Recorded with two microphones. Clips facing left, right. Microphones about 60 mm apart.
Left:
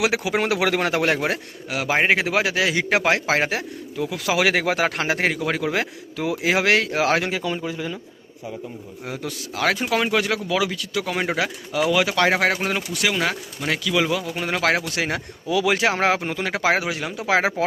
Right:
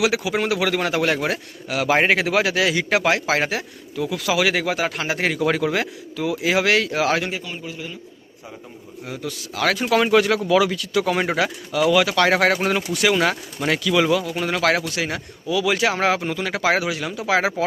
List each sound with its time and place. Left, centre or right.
0.0 s speech: left
1.0 s a man's voice: left
1.7 s a man's voice: centre
4.4 s speech: left
5.4 s speech: centre
6.4 s speech: left
9.0 s speech: left
9.6 s speech: centre
11.7 s speech: centre
14.9 s speech: left